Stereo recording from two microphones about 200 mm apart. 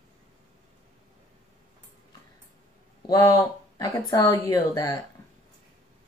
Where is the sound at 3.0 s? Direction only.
20° left (ahead or behind).